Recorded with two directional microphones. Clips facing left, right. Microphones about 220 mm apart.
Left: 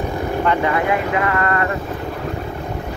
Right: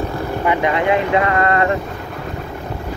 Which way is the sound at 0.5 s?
20° right (ahead or behind).